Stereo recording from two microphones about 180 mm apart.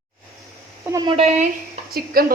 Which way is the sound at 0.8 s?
15° right (ahead or behind).